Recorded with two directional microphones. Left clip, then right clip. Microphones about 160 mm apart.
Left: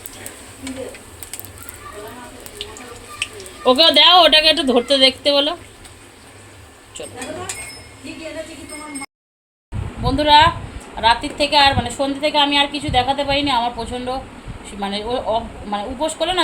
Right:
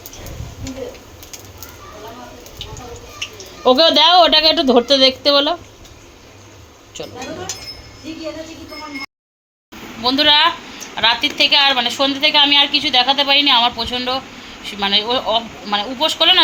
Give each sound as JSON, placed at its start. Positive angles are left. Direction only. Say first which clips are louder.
{"t": 3.6, "sound": "a woman's voice", "louder": "even", "side_deg": -20}
{"t": 10.0, "sound": "a woman's voice", "louder": "even", "side_deg": 5}